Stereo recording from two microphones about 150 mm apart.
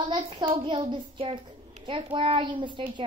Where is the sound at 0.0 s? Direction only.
35° right (ahead or behind).